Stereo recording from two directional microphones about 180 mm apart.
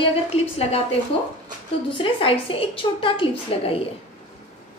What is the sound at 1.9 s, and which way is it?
A woman's voice, 30° left (ahead or behind).